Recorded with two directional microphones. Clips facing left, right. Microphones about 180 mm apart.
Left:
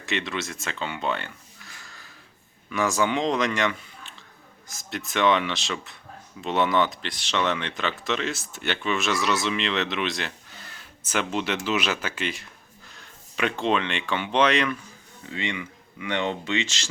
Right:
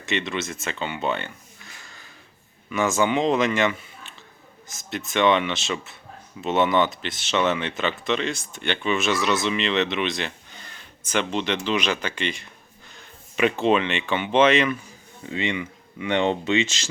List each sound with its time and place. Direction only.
0.0 s speech: centre (ahead or behind)
15.3 s speech: 20° right (ahead or behind)